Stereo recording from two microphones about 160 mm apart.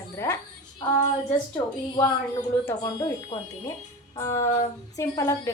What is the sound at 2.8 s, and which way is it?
A woman's voice, 25° left (ahead or behind).